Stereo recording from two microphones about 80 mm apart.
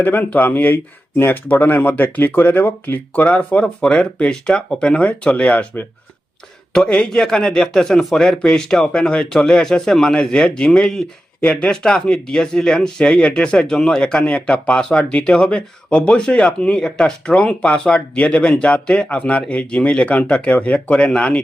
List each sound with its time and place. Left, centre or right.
0.0 s a man's voice: left